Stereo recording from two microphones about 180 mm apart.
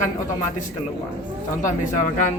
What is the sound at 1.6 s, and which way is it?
Speech, 45° left (ahead or behind).